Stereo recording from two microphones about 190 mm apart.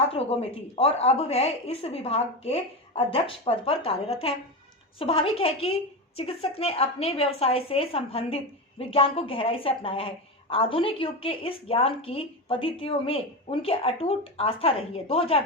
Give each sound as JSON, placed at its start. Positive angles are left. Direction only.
{"t": 0.1, "sound": "a woman's voice", "side_deg": 30}